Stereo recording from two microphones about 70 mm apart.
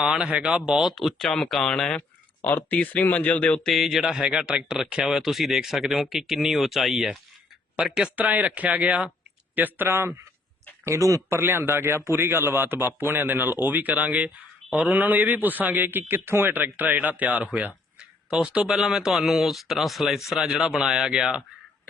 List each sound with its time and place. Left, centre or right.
0.0 s speech: centre
2.6 s speech: left
3.7 s speech: centre
8.1 s a man's voice: right
10.8 s speech: right
11.3 s a man's voice: right; by 21.4 s centre